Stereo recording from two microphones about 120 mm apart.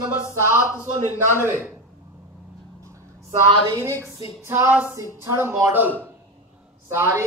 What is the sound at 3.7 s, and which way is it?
A woman's voice, 25° right (ahead or behind).